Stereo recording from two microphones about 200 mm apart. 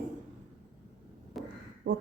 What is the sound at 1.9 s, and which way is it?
Speech, 50° right (ahead or behind).